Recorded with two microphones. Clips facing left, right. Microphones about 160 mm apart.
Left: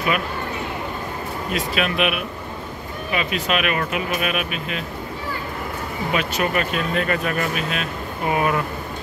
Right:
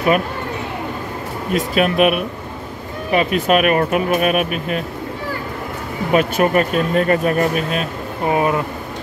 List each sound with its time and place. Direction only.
1.5 s speech: 45° right (ahead or behind)
6.1 s speech: 45° right (ahead or behind); by 8.6 s 30° right (ahead or behind)